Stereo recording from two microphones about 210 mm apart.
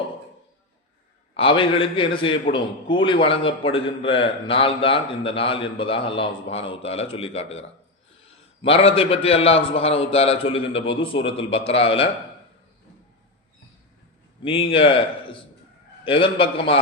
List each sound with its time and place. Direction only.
1.4 s a man's voice: 25° left (ahead or behind)
14.4 s a man's voice: 25° left (ahead or behind)